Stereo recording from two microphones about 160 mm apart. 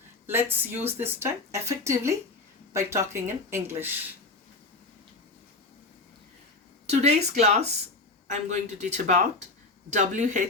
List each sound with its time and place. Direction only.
0.3 s speech: 15° right (ahead or behind)
6.8 s speech: 45° right (ahead or behind)